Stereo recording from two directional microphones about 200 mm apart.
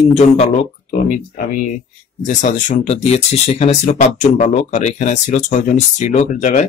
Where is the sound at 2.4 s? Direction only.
40° left (ahead or behind).